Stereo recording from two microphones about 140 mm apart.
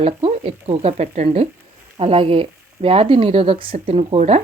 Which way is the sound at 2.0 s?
45° right (ahead or behind).